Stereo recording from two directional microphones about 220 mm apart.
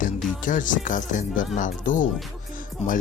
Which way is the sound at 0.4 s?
35° left (ahead or behind).